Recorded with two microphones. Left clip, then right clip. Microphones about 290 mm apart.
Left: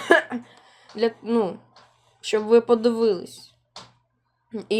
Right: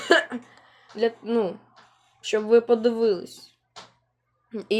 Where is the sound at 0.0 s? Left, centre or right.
Centre.